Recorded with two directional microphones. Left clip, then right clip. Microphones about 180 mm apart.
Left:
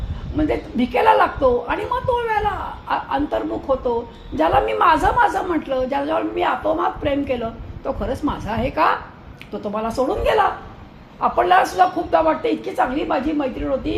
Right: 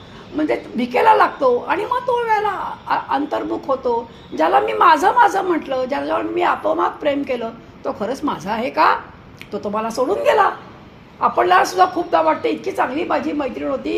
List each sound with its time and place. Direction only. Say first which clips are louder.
0.3 s a woman's voice: right 1 dB; 30° right (ahead or behind)